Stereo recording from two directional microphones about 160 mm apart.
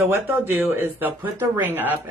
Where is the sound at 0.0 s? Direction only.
15° right (ahead or behind).